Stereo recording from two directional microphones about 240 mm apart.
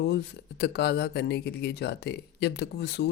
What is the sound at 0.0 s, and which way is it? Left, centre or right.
Speech, left.